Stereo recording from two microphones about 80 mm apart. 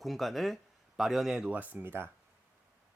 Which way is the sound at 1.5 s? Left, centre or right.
Right.